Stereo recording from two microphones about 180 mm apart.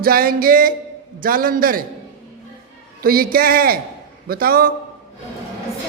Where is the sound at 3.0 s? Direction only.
55° right (ahead or behind).